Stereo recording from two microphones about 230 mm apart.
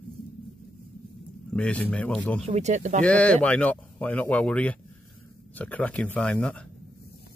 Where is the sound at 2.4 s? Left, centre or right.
Right.